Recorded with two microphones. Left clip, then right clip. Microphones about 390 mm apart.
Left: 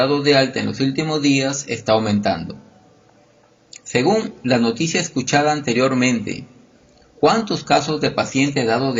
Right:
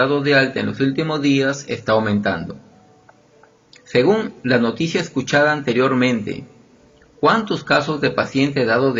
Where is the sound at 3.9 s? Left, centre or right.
Centre.